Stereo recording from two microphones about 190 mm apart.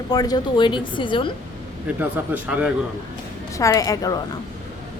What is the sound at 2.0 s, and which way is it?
Speech, 10° right (ahead or behind).